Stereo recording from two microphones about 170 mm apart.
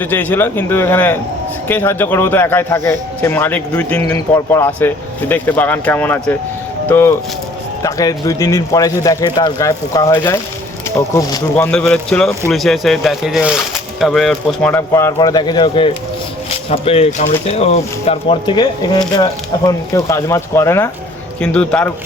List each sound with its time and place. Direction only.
0.0 s speech: 10° left (ahead or behind)
11.5 s speech: 10° left (ahead or behind)
14.7 s speech: 15° left (ahead or behind)